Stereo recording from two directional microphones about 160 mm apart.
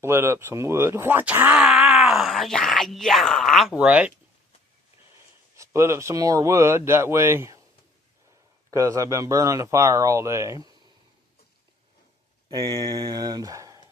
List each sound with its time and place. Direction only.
0.0 s speech: 15° right (ahead or behind)
5.5 s speech: 15° right (ahead or behind)
8.7 s speech: 20° right (ahead or behind)
12.5 s speech: 25° right (ahead or behind)